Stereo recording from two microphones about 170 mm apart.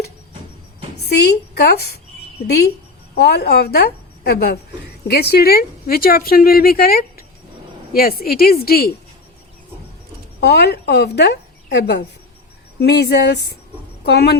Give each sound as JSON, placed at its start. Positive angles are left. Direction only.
{"t": 1.1, "sound": "a woman's voice", "side_deg": 75}
{"t": 3.2, "sound": "a woman's voice", "side_deg": 70}
{"t": 10.4, "sound": "a woman's voice", "side_deg": 75}